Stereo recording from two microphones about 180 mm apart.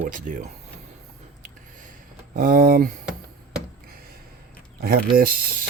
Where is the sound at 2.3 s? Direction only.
50° right (ahead or behind).